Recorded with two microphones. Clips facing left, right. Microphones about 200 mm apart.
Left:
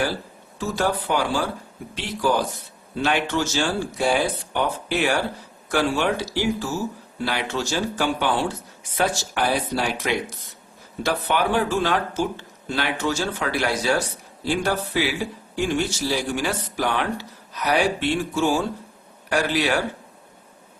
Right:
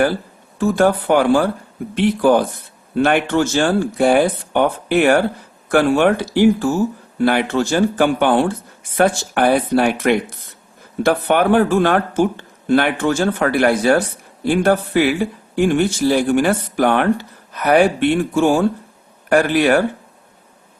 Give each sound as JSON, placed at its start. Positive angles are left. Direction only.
{"t": 0.6, "sound": "speech", "side_deg": -55}